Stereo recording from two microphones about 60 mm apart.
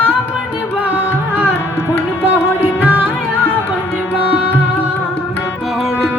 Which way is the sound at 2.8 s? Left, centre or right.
Right.